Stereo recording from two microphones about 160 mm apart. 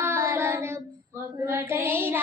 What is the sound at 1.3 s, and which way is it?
Music, 15° right (ahead or behind).